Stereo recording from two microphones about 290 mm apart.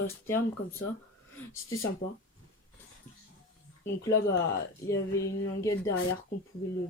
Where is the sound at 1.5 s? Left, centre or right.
Left.